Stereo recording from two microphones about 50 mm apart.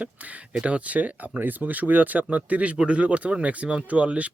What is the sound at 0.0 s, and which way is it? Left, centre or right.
Speech, right.